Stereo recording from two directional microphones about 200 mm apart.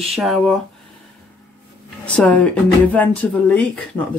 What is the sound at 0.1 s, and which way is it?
Speech, centre (ahead or behind).